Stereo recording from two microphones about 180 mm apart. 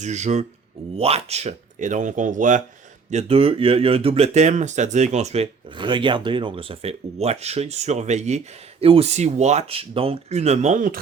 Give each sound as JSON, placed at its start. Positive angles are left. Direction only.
{"t": 0.0, "sound": "speech", "side_deg": -40}